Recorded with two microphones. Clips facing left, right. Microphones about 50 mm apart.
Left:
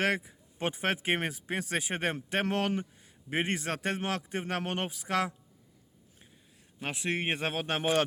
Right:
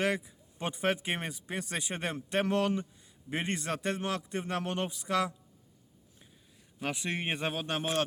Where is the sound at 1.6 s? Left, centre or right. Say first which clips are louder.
Left 3 dB; left.